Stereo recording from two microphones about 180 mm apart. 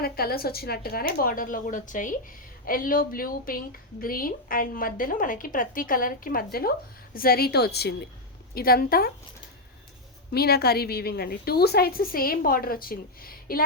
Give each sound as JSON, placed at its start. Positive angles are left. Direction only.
{"t": 0.0, "sound": "a woman's voice", "side_deg": 55}
{"t": 10.3, "sound": "a woman's voice", "side_deg": 60}